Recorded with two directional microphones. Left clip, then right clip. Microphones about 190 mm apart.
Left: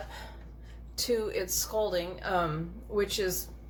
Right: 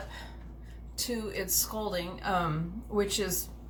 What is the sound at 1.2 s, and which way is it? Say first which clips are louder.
A woman's voice: left 1 dB; 35° left (ahead or behind).